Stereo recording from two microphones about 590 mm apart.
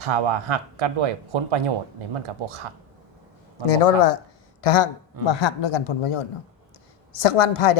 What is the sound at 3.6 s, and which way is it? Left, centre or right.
Speech, left.